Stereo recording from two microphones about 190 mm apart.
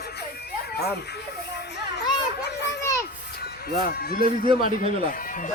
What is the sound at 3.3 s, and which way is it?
Speech, 55° left (ahead or behind).